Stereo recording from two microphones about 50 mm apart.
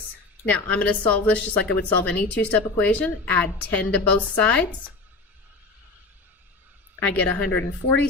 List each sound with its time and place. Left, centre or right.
0.4 s a woman's voice: left
7.1 s a woman's voice: left